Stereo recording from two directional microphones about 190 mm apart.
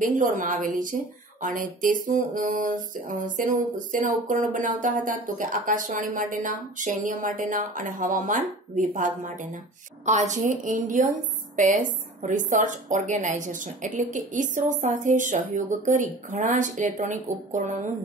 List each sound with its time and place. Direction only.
0.0 s a woman's voice: 45° right (ahead or behind)